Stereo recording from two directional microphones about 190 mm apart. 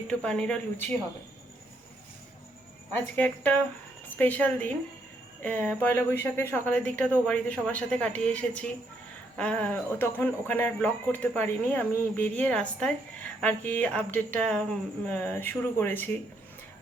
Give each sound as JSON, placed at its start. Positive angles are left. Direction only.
{"t": 0.1, "sound": "speech", "side_deg": 5}
{"t": 2.9, "sound": "speech", "side_deg": 10}